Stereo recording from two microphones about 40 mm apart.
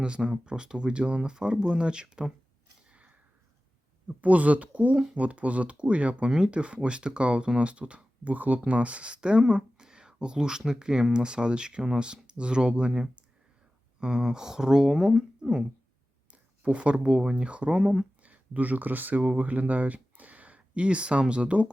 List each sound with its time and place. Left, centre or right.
0.0 s speech: right
4.1 s speech: right
9.8 s a sound: centre
10.7 s speech: centre
16.3 s speech: right
17.7 s speech: centre
18.2 s speech: right
19.2 s speech: right